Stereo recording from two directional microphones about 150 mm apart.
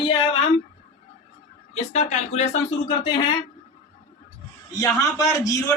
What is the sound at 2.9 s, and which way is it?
Speech, 30° left (ahead or behind).